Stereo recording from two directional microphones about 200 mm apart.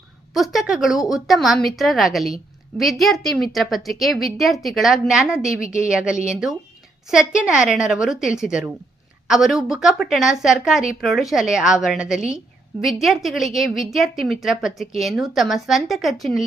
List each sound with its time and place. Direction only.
0.3 s a woman's voice: centre (ahead or behind)